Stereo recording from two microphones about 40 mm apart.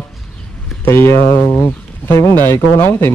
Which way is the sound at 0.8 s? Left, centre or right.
Left.